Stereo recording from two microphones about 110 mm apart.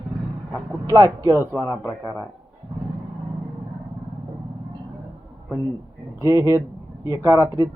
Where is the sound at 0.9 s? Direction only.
30° right (ahead or behind).